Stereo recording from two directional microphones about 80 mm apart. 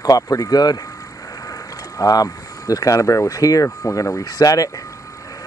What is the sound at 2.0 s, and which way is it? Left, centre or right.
Speech, left.